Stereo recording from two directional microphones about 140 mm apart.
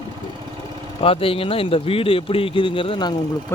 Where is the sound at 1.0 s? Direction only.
40° left (ahead or behind).